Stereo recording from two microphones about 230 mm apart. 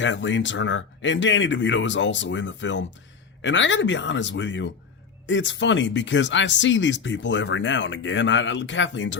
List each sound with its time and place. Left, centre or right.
0.0 s speech: left